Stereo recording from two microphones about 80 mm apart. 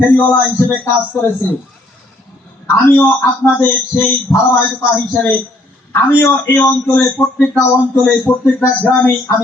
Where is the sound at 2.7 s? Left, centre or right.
Left.